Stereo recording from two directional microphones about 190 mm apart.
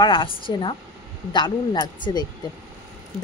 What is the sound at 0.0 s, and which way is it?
Speech, 25° left (ahead or behind).